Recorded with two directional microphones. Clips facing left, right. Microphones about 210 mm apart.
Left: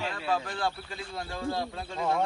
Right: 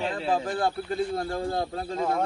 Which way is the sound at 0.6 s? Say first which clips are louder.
Right 7 dB; 50° right (ahead or behind).